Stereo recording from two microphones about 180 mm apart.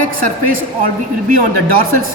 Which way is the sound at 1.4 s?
55° right (ahead or behind).